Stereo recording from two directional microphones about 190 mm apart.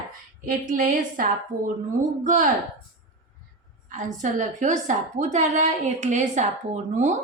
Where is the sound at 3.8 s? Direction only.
40° right (ahead or behind).